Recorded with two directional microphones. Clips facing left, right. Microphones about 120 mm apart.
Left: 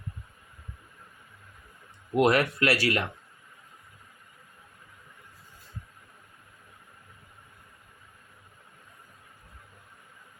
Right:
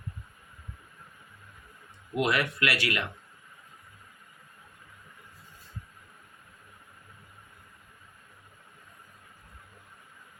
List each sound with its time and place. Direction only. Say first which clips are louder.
2.1 s speech: left 5 dB; 40° left (ahead or behind)